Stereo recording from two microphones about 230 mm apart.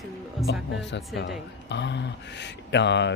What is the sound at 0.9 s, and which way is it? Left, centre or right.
Speech, left.